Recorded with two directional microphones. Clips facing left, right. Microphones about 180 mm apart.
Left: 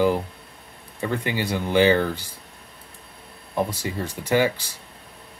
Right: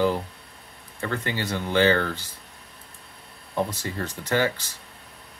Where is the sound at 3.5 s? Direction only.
10° left (ahead or behind).